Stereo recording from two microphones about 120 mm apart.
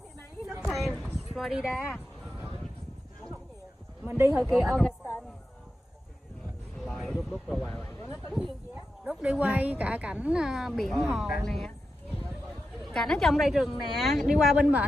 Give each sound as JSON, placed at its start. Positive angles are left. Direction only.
{"t": 0.7, "sound": "a sound", "side_deg": 0}
{"t": 1.3, "sound": "speech", "side_deg": -5}
{"t": 4.0, "sound": "speech", "side_deg": -20}
{"t": 4.4, "sound": "speech", "side_deg": 0}
{"t": 6.8, "sound": "a sound", "side_deg": 5}
{"t": 7.2, "sound": "speech", "side_deg": 0}
{"t": 8.0, "sound": "speech", "side_deg": 20}
{"t": 9.0, "sound": "a woman's voice", "side_deg": -10}
{"t": 12.8, "sound": "speech", "side_deg": 5}